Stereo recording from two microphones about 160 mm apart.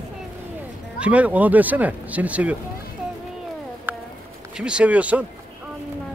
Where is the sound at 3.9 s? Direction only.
10° right (ahead or behind).